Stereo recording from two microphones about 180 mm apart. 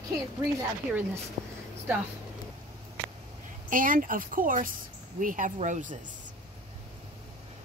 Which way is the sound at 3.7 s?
50° right (ahead or behind).